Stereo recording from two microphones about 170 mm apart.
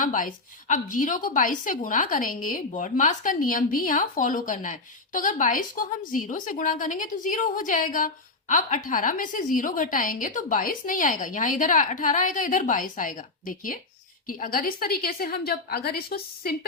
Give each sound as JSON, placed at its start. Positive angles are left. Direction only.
{"t": 0.0, "sound": "a woman's voice", "side_deg": 50}